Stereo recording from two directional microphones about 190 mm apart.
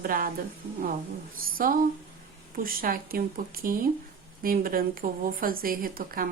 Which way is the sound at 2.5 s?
50° right (ahead or behind).